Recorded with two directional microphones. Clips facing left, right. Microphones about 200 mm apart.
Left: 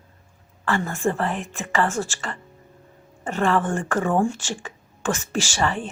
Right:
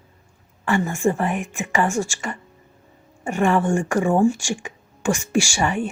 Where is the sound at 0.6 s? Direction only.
15° right (ahead or behind).